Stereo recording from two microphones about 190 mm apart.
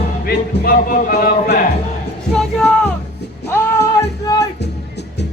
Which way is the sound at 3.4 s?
15° left (ahead or behind).